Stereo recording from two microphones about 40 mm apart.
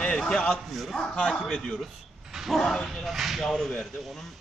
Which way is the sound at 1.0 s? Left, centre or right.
Centre.